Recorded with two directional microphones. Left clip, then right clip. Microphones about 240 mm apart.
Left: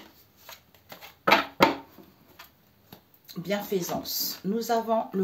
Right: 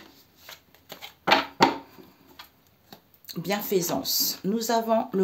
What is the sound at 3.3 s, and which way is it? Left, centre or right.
Speech, right.